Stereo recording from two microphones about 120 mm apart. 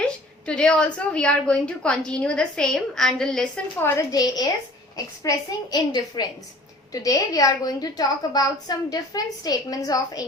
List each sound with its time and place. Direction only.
0.0 s a sound: 10° left (ahead or behind)
0.9 s a woman's voice: 10° left (ahead or behind)
3.9 s a woman's voice: 30° left (ahead or behind)